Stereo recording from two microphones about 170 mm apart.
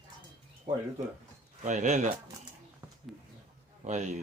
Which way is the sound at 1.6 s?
45° right (ahead or behind).